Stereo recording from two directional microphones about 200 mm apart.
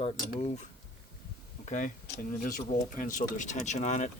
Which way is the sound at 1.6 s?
40° left (ahead or behind).